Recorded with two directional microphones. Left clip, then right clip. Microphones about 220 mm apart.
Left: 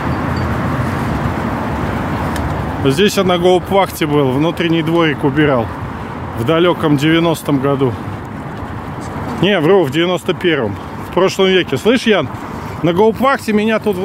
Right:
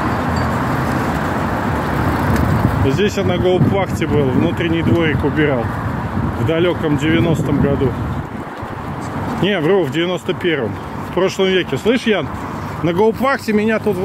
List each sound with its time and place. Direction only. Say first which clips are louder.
2.9 s speech: left 7 dB; 40° left (ahead or behind)
9.4 s speech: left 4 dB; 45° left (ahead or behind)
12.8 s speech: left 3 dB; 30° left (ahead or behind)